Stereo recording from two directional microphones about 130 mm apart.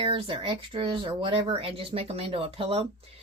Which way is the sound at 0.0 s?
45° right (ahead or behind).